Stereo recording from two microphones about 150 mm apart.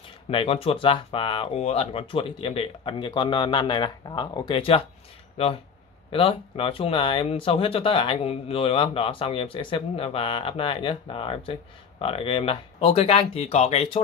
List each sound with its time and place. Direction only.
0.3 s speech: 35° left (ahead or behind)